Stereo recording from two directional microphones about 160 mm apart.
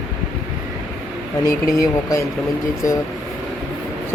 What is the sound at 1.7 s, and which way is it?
Speech, 20° left (ahead or behind).